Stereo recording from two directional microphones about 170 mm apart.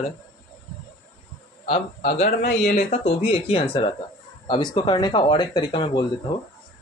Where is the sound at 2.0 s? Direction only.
40° left (ahead or behind).